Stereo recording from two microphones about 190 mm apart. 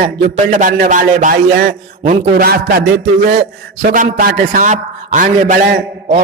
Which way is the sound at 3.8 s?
45° right (ahead or behind).